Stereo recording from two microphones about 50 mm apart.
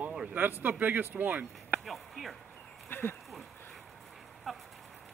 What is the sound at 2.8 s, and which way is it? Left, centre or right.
Speech, left.